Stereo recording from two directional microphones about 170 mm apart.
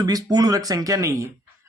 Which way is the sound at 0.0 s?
25° right (ahead or behind).